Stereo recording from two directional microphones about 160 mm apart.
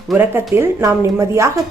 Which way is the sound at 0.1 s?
10° right (ahead or behind).